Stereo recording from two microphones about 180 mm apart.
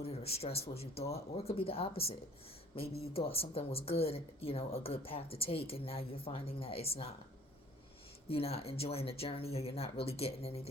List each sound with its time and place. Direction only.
0.0 s speech: 35° left (ahead or behind)
8.3 s speech: 35° left (ahead or behind)